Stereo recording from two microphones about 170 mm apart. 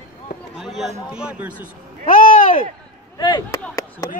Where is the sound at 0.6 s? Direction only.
Centre (ahead or behind).